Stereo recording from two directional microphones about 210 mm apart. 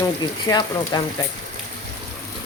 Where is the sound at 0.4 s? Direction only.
20° left (ahead or behind).